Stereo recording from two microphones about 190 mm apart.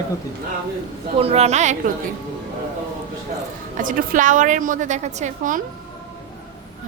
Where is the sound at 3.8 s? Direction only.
45° right (ahead or behind).